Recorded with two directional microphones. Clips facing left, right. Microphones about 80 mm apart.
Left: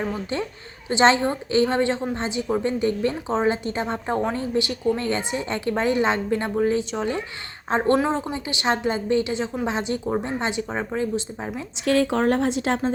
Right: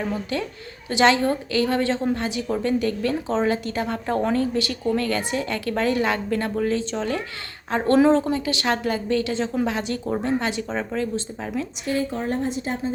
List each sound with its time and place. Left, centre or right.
0.1 s a woman's voice: left
7.9 s a woman's voice: centre
8.2 s a woman's voice: centre
11.9 s speech: left